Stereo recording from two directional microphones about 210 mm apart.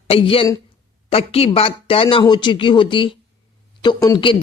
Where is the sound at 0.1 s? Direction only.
25° left (ahead or behind).